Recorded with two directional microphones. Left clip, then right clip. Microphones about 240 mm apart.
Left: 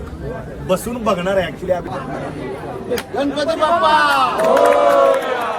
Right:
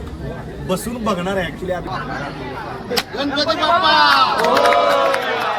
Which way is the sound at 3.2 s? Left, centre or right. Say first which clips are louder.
Left 2 dB; left.